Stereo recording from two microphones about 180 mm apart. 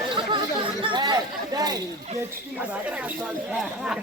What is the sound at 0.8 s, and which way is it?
Chatter, 25° right (ahead or behind).